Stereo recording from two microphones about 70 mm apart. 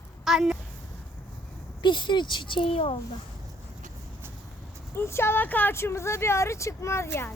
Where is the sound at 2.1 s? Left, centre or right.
Left.